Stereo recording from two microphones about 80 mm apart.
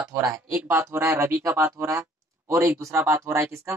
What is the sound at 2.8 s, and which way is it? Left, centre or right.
Speech, right.